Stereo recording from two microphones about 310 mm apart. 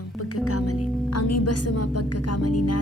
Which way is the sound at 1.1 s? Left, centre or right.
Left.